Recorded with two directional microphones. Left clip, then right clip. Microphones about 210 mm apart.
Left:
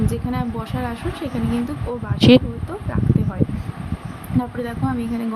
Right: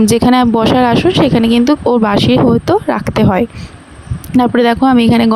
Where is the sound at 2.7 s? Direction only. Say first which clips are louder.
Right 14 dB; 50° right (ahead or behind).